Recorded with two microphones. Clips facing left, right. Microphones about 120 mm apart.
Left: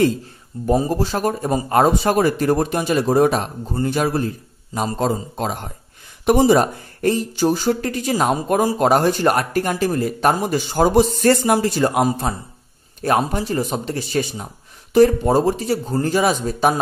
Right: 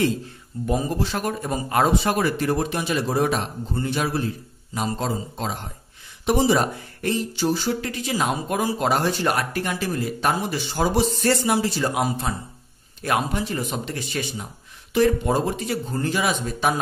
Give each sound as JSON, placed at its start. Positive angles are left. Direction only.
{"t": 0.7, "sound": "speech", "side_deg": 40}